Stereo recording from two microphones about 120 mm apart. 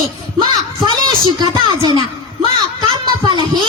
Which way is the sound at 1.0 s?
35° right (ahead or behind).